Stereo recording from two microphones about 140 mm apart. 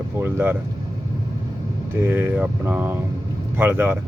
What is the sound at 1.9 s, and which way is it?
Speech, 15° right (ahead or behind).